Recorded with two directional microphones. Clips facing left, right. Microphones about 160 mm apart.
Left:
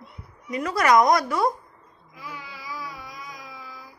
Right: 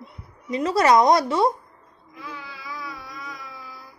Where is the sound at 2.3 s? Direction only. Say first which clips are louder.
Even; 15° left (ahead or behind).